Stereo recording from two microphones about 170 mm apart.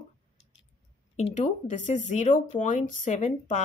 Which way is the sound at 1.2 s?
40° left (ahead or behind).